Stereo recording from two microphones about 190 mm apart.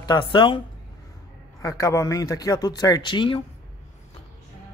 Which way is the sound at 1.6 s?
15° left (ahead or behind).